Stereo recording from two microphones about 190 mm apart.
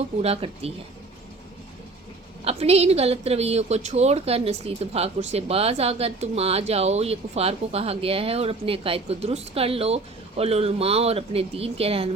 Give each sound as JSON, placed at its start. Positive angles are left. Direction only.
{"t": 0.2, "sound": "a woman's voice", "side_deg": -30}
{"t": 2.4, "sound": "a woman's voice", "side_deg": -30}